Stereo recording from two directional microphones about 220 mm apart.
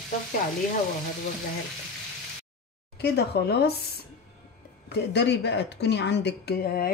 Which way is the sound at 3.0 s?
50° left (ahead or behind).